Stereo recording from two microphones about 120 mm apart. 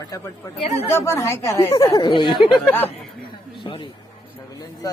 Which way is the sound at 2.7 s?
15° left (ahead or behind).